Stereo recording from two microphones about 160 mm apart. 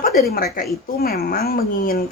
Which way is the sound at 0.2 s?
75° left (ahead or behind).